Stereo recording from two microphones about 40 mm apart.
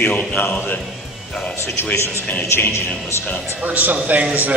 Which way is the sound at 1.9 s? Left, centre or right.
Left.